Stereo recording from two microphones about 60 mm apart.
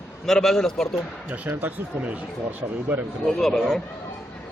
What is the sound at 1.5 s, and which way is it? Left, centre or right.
Speech, right.